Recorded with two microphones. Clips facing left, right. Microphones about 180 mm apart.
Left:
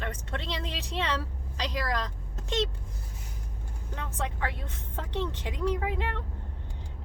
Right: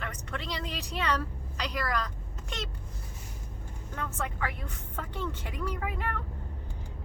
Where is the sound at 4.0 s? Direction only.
25° left (ahead or behind).